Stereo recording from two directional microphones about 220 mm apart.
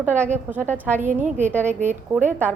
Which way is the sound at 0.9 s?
35° right (ahead or behind).